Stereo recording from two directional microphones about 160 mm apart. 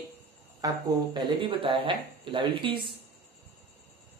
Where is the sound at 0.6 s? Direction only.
25° right (ahead or behind).